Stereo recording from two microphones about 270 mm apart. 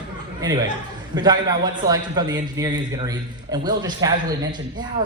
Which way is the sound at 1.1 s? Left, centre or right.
Centre.